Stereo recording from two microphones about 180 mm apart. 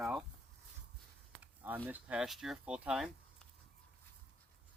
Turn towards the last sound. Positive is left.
turn(degrees=-5)  # may be behind; listen again after turning